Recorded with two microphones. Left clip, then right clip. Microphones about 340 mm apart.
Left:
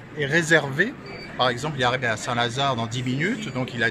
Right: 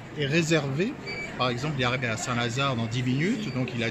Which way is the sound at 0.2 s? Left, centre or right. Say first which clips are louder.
Left 6 dB; centre.